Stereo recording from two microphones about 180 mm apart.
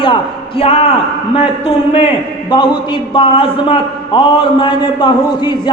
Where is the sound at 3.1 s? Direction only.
30° left (ahead or behind).